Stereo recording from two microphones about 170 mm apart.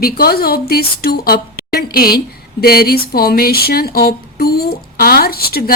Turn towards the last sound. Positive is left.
turn(degrees=65)  # may be behind; listen again after turning